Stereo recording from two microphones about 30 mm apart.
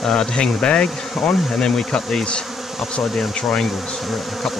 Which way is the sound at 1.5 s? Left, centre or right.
Left.